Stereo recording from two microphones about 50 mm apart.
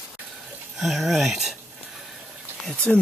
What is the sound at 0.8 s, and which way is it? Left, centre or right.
Speech, centre.